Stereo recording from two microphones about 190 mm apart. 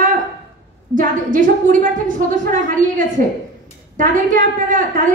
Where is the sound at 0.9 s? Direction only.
45° right (ahead or behind).